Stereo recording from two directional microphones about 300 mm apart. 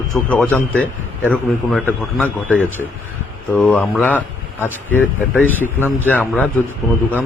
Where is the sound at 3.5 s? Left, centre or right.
Centre.